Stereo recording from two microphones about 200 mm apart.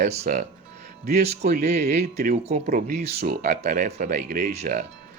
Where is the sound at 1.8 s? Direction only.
50° right (ahead or behind).